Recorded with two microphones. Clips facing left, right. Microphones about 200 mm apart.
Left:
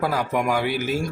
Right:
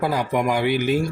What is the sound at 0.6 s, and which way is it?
Speech, 45° left (ahead or behind).